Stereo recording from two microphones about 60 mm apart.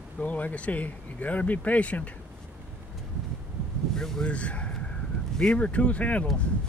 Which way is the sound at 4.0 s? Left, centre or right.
Centre.